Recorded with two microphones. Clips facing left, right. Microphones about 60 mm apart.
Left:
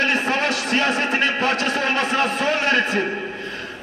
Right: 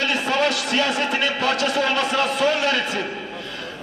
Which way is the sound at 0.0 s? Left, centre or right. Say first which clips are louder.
Left 1 dB; left.